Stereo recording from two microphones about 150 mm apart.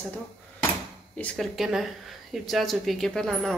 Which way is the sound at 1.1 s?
5° left (ahead or behind).